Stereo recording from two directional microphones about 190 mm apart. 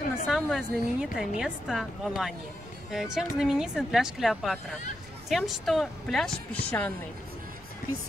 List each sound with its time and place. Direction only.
0.3 s speech: centre (ahead or behind)